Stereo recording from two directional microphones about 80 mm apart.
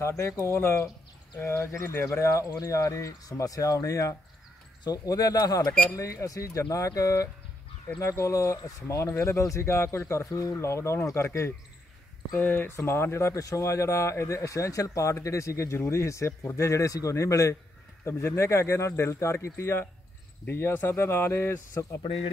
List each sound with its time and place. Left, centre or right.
0.5 s speech: left
12.4 s speech: left